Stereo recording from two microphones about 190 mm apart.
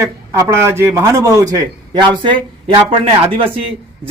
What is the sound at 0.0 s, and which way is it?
A man's voice, 15° right (ahead or behind).